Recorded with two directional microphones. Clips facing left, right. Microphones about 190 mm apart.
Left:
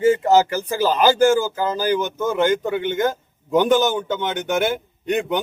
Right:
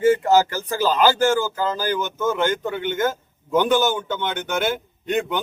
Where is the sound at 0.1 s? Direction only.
20° left (ahead or behind).